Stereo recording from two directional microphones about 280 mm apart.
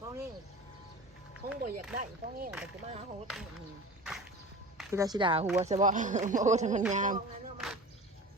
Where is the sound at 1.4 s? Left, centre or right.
Right.